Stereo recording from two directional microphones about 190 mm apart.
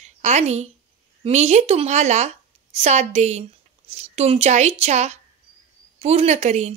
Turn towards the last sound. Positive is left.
turn(degrees=-35)  # may be behind; listen again after turning